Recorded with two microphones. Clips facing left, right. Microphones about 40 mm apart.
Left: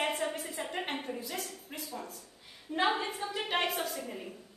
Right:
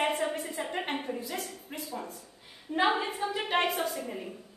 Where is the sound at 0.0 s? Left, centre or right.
Centre.